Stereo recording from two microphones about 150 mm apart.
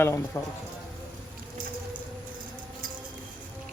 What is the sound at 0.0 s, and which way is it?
Speech, 15° left (ahead or behind).